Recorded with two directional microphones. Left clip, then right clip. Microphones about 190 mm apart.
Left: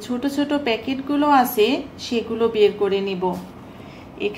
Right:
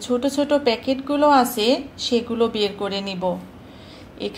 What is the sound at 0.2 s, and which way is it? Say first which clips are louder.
A woman's voice: right 1 dB; 30° right (ahead or behind).